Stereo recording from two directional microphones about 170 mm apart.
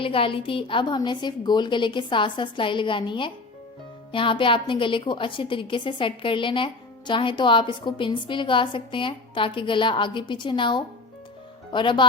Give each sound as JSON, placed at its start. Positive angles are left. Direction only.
{"t": 0.0, "sound": "a woman's voice", "side_deg": 30}